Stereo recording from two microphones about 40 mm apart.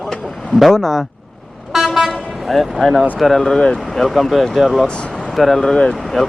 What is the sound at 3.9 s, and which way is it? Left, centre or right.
Speech, centre.